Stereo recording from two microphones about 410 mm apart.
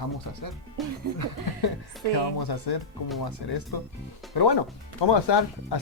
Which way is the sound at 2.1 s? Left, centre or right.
Left.